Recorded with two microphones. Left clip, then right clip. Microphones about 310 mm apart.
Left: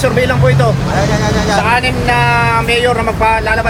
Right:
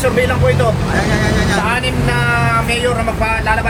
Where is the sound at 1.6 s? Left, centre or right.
Left.